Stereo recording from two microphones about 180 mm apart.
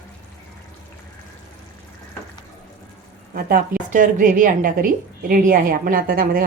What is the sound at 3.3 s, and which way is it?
A woman's voice, 50° right (ahead or behind).